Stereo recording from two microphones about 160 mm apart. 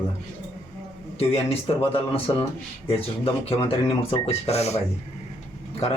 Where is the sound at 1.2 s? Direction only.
35° left (ahead or behind).